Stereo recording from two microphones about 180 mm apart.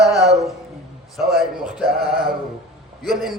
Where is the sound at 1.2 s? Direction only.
60° right (ahead or behind).